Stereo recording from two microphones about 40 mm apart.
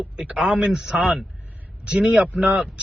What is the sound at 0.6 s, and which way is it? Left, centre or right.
Speech, centre.